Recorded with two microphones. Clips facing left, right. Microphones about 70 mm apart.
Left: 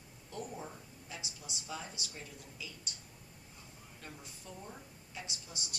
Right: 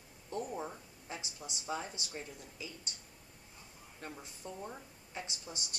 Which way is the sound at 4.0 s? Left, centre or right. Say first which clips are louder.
Right 5 dB; right.